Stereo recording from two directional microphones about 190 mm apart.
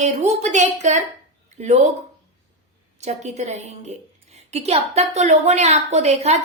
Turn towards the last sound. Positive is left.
turn(degrees=-35)  # may be behind; listen again after turning